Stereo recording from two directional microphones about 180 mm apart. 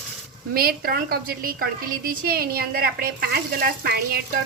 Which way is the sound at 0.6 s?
55° right (ahead or behind).